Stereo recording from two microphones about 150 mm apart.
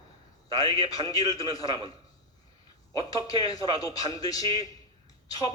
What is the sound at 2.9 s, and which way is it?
A man's voice, 25° left (ahead or behind).